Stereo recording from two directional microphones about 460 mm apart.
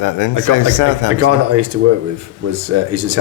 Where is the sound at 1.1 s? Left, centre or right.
Right.